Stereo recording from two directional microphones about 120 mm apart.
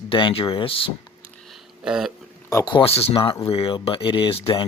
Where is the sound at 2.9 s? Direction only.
55° left (ahead or behind).